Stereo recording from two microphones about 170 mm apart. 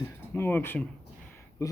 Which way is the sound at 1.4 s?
15° left (ahead or behind).